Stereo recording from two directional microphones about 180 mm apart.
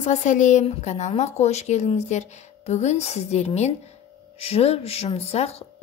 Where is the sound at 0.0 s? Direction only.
40° left (ahead or behind).